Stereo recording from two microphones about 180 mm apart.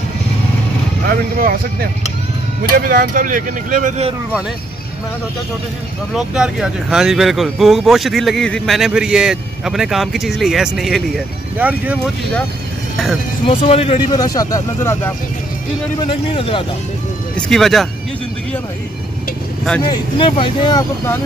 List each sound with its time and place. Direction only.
1.0 s speech: 55° right (ahead or behind)
2.9 s speech: 50° right (ahead or behind)
6.1 s speech: 5° right (ahead or behind)
13.5 s speech: 35° left (ahead or behind); by 15.0 s 15° left (ahead or behind)
16.0 s speech: 30° left (ahead or behind)
17.4 s speech: centre (ahead or behind)
19.8 s speech: 25° left (ahead or behind)